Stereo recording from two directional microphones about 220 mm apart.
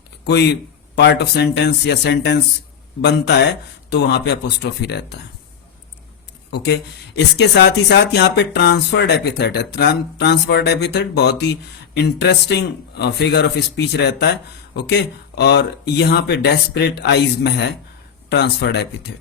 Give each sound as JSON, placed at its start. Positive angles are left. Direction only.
{"t": 0.3, "sound": "speech", "side_deg": 50}
{"t": 7.3, "sound": "speech", "side_deg": 50}